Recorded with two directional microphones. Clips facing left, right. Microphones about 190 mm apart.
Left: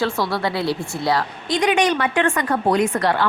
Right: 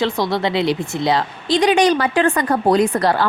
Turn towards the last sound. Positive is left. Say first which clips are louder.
# right 3 dB
turn(degrees=-35)  # may be behind; listen again after turning